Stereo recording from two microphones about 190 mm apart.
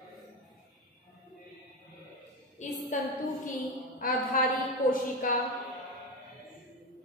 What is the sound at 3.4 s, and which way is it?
A woman's voice, 45° left (ahead or behind).